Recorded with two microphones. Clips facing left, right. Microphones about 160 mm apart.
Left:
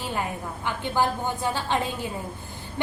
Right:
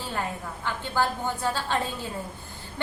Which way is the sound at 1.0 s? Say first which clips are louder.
Left 1 dB; 15° left (ahead or behind).